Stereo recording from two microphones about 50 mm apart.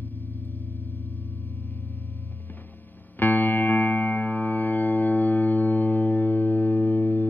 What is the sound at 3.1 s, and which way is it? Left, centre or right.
Music, left.